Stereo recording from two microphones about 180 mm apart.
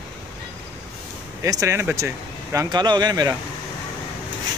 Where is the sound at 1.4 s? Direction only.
20° right (ahead or behind).